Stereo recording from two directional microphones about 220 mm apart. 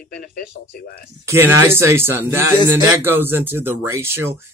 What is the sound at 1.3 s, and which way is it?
Speech, 10° right (ahead or behind).